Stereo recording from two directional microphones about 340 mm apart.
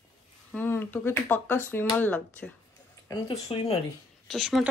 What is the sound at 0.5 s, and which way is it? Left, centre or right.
Speech, centre.